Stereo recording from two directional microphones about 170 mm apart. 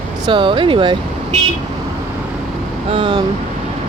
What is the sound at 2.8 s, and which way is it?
Speech, 30° right (ahead or behind).